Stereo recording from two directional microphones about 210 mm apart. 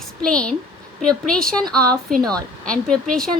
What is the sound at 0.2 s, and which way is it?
A woman's voice, 5° left (ahead or behind).